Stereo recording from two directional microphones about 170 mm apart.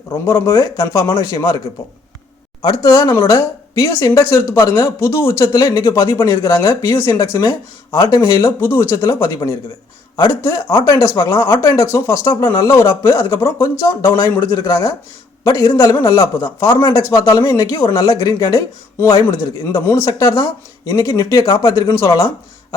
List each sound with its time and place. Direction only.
0.1 s a man's voice: 15° left (ahead or behind)
2.6 s a man's voice: 25° left (ahead or behind)
19.7 s a man's voice: 15° left (ahead or behind)